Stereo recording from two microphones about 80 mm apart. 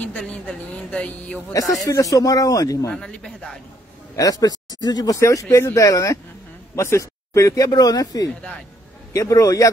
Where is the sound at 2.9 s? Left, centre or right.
Centre.